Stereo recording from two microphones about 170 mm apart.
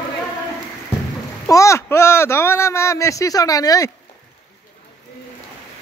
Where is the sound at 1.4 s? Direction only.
20° left (ahead or behind).